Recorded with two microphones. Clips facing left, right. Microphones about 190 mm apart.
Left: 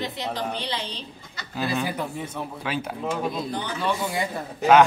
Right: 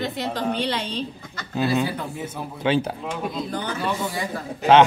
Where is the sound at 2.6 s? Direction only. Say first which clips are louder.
Right 10 dB; 30° right (ahead or behind).